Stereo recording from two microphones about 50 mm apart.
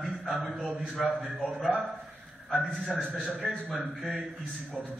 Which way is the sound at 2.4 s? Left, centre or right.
Centre.